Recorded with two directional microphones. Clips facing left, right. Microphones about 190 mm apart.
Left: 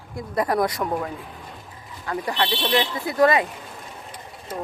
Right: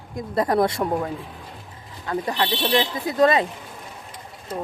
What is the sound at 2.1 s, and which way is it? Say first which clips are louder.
Speech: right 1 dB; 20° right (ahead or behind).